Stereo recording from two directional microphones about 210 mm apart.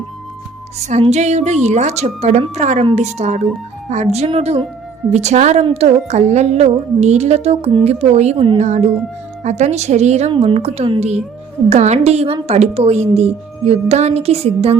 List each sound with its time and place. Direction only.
0.8 s speech: 30° right (ahead or behind)